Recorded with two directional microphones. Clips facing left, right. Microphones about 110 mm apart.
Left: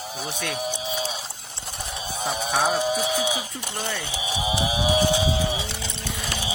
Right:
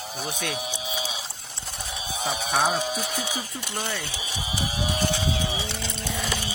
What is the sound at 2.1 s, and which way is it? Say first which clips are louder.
Speech: left 1 dB; centre (ahead or behind).